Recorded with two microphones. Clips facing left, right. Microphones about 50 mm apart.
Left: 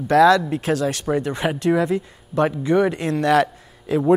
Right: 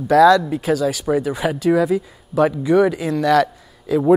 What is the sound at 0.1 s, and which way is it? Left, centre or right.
Speech, centre.